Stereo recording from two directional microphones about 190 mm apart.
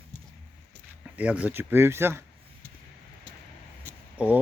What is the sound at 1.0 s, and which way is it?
Speech, 5° right (ahead or behind).